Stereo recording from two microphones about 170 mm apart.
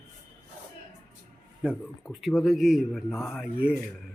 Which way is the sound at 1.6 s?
5° right (ahead or behind).